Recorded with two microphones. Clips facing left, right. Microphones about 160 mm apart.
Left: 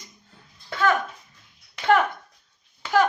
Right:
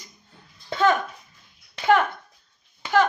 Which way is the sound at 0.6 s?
25° right (ahead or behind).